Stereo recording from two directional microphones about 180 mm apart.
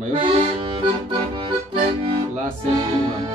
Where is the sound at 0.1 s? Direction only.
30° right (ahead or behind).